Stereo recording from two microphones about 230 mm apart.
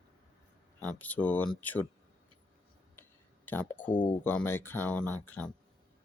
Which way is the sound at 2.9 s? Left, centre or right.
Centre.